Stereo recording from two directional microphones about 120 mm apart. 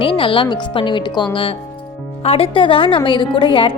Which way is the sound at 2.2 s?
50° left (ahead or behind).